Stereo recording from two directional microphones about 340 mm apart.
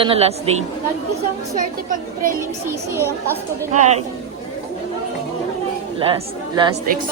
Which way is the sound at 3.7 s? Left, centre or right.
Centre.